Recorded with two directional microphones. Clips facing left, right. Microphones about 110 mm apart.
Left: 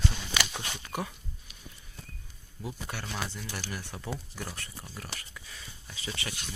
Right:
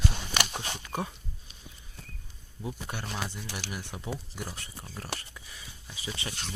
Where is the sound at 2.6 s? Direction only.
20° right (ahead or behind).